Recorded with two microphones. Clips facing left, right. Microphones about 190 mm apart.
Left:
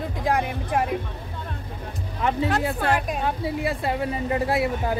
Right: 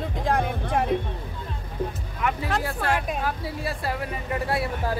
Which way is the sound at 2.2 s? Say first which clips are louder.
Left 2 dB; 30° left (ahead or behind).